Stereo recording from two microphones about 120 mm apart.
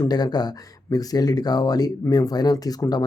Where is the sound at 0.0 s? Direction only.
35° left (ahead or behind).